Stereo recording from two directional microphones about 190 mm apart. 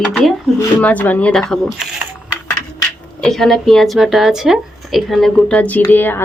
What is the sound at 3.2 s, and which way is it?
A woman's voice, centre (ahead or behind).